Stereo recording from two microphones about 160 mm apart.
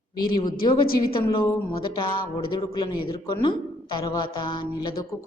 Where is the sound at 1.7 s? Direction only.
30° left (ahead or behind).